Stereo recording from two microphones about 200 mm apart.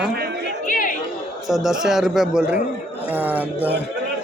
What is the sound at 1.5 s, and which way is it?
Speech, centre (ahead or behind).